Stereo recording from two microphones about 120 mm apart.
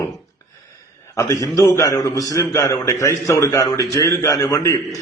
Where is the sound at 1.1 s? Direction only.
25° left (ahead or behind).